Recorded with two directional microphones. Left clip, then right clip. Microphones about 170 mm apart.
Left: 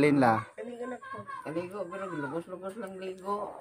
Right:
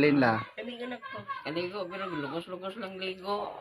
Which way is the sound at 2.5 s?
15° left (ahead or behind).